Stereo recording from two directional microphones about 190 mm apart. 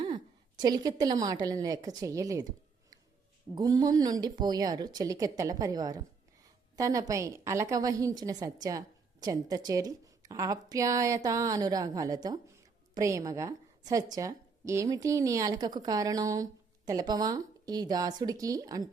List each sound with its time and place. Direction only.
0.6 s a woman's voice: 20° right (ahead or behind)
3.5 s a woman's voice: 20° right (ahead or behind)